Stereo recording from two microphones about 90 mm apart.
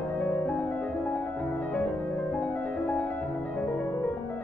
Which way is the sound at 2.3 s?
15° left (ahead or behind).